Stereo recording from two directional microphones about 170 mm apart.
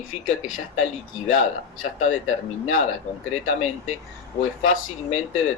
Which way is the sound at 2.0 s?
45° left (ahead or behind).